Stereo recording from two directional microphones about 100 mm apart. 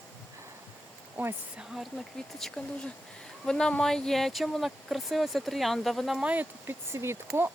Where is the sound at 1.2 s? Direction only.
15° right (ahead or behind).